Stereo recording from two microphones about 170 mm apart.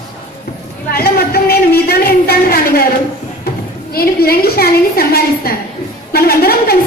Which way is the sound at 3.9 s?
65° left (ahead or behind).